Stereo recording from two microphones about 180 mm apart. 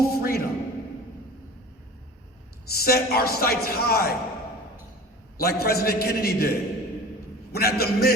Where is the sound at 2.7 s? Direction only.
60° left (ahead or behind).